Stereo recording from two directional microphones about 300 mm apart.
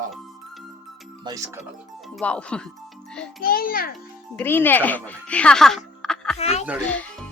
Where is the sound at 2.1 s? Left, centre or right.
Centre.